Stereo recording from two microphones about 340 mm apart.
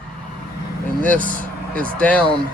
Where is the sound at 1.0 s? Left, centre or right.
Centre.